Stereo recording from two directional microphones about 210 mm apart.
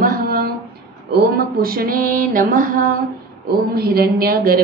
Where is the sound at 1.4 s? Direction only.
45° right (ahead or behind).